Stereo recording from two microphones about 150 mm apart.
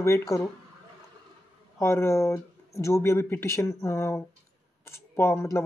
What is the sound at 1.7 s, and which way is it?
Speech, 20° left (ahead or behind).